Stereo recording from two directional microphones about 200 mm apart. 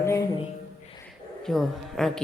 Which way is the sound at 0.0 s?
15° left (ahead or behind).